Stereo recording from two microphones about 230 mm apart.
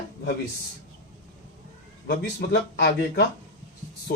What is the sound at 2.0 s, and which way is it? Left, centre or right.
Speech, left.